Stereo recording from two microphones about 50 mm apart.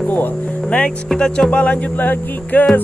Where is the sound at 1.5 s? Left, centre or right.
Left.